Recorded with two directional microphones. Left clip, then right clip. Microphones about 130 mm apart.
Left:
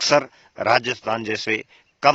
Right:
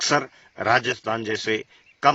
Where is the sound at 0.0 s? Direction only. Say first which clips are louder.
Left 4 dB; 25° left (ahead or behind).